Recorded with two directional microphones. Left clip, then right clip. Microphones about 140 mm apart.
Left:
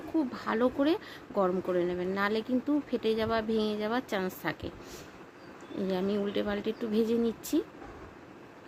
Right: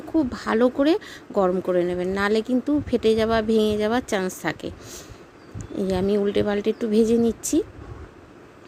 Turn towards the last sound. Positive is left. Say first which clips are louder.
# right 8 dB
turn(degrees=-45)  # may be behind; listen again after turning